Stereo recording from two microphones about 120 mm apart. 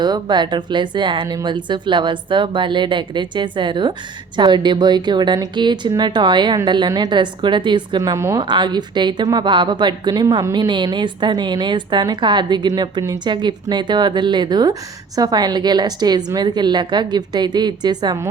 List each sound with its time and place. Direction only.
0.0 s a woman's voice: 40° right (ahead or behind)
8.4 s a woman's voice: 40° right (ahead or behind)